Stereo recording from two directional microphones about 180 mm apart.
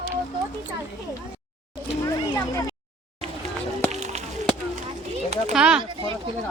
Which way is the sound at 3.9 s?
40° right (ahead or behind).